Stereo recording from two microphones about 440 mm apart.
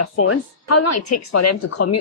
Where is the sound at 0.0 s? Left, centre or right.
Left.